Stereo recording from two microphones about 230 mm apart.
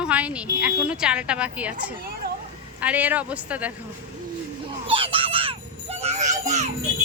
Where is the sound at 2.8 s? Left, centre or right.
Centre.